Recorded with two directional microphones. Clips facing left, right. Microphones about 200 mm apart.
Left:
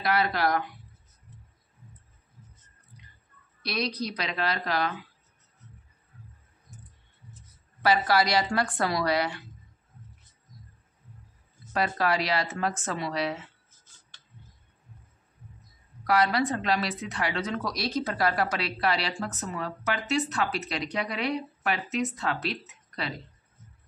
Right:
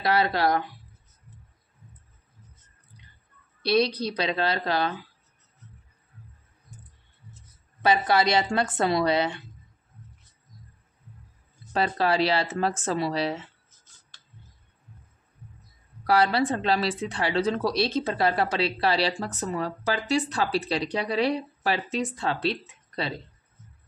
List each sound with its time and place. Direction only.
0.0 s speech: 25° right (ahead or behind)
3.6 s speech: 30° right (ahead or behind)
7.8 s speech: 20° right (ahead or behind)
11.7 s speech: 30° right (ahead or behind)
16.0 s speech: 30° right (ahead or behind)
22.7 s a sound: 30° right (ahead or behind)